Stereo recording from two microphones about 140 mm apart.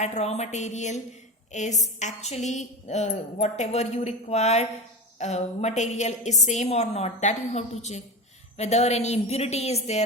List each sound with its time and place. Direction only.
0.0 s a woman's voice: 55° left (ahead or behind)